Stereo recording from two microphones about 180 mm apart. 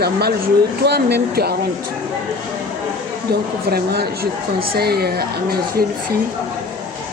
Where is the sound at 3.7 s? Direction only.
60° right (ahead or behind).